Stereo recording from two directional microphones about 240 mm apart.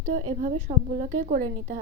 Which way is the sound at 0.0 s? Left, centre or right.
Right.